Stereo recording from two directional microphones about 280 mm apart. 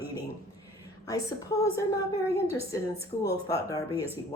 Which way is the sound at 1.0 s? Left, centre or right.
Centre.